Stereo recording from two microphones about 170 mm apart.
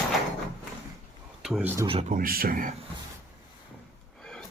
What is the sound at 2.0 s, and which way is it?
Speech, 55° right (ahead or behind).